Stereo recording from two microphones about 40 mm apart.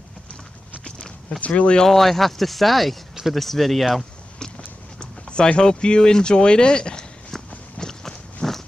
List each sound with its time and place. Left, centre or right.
1.5 s speech: left
1.9 s speech: centre
4.6 s run: left; by 8.6 s centre